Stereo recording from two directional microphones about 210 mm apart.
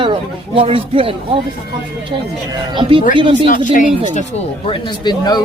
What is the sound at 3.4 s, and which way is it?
Speech, 40° left (ahead or behind).